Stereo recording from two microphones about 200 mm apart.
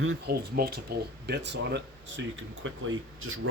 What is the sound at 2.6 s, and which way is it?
Speech, 85° right.